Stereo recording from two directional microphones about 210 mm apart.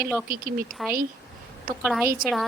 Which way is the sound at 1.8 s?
5° right (ahead or behind).